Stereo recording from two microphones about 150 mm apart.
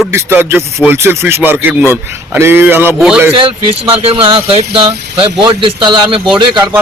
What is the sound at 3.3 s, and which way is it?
Speech, 35° right (ahead or behind).